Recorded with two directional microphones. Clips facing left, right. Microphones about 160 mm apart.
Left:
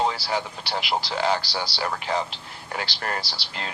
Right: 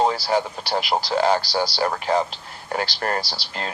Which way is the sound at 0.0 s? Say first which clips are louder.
Right 5 dB; 45° right (ahead or behind).